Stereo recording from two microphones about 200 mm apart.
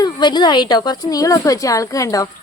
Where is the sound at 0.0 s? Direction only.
20° left (ahead or behind).